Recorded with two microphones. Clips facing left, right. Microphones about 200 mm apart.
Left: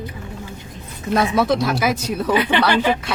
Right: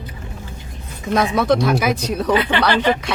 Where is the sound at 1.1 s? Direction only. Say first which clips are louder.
Right 1 dB; 5° left (ahead or behind).